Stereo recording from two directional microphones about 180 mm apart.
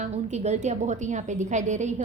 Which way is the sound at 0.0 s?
40° right (ahead or behind).